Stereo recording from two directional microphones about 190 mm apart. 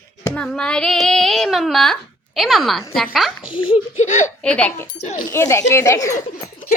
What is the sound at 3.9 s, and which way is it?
Speech, 40° left (ahead or behind).